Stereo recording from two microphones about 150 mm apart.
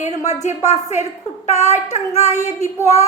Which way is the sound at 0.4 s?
50° left (ahead or behind).